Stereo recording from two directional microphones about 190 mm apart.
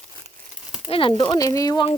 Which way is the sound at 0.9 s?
30° left (ahead or behind).